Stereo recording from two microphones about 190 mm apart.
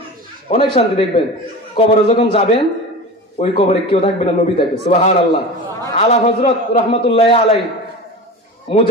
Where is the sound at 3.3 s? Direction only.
30° left (ahead or behind).